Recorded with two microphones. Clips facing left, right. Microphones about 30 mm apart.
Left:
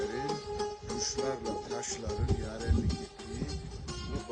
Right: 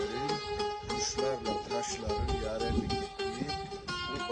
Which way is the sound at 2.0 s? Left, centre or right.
Right.